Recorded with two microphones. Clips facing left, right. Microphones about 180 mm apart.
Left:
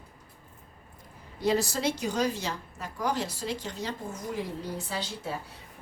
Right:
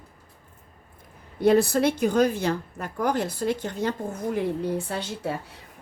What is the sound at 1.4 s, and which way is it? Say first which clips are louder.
A woman's voice: right 8 dB; 55° right (ahead or behind).